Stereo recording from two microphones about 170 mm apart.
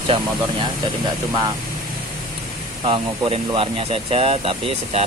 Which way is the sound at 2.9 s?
30° right (ahead or behind).